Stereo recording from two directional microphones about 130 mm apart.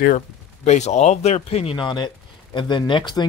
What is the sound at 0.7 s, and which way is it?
Speech, 60° left (ahead or behind).